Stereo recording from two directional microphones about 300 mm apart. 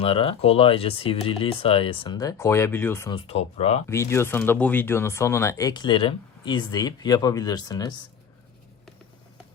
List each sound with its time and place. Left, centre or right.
0.0 s speech: centre
3.8 s speech: centre